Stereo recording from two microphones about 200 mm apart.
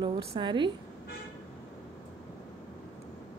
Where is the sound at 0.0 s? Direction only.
25° right (ahead or behind).